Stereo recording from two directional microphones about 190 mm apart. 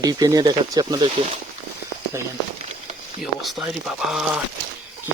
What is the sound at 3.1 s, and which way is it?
Speech, centre (ahead or behind).